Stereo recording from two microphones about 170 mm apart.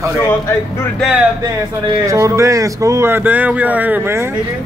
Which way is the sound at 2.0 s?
20° right (ahead or behind).